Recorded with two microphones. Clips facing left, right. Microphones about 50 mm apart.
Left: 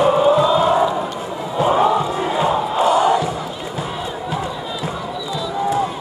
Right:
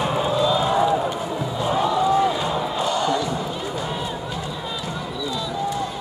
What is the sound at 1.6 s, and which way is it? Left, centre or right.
Music, left.